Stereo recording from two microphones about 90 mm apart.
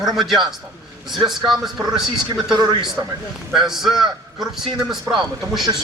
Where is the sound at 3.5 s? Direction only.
5° right (ahead or behind).